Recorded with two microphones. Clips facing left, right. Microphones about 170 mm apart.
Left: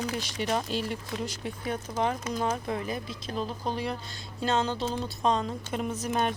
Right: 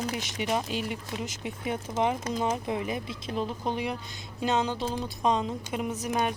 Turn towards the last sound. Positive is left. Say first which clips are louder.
# even
turn(degrees=-15)  # may be behind; listen again after turning